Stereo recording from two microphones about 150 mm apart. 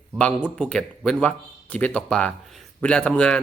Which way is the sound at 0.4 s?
5° left (ahead or behind).